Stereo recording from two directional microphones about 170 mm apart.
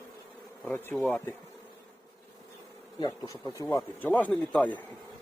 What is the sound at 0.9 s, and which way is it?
Bee, 5° left (ahead or behind).